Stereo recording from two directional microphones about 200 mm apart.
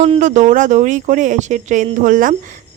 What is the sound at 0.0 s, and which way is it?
Speech, 35° right (ahead or behind).